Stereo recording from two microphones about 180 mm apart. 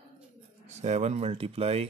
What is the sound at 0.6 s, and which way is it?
Speech, 40° right (ahead or behind).